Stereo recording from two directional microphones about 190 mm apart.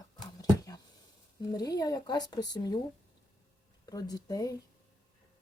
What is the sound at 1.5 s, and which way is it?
Speech, 20° left (ahead or behind).